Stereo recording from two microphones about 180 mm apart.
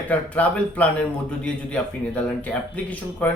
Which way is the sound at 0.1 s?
10° left (ahead or behind).